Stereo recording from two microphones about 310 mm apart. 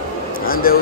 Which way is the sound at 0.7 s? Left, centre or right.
Left.